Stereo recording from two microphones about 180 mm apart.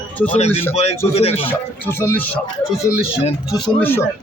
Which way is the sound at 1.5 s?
10° left (ahead or behind).